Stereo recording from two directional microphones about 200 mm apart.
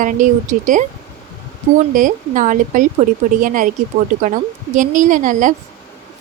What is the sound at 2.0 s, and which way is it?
Speech, 40° right (ahead or behind).